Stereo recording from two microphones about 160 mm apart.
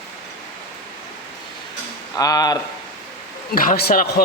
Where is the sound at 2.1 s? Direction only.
20° left (ahead or behind).